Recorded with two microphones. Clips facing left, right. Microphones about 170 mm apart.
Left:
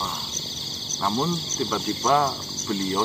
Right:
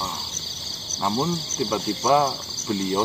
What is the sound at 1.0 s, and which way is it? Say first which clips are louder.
Speech: right 1 dB; 10° right (ahead or behind).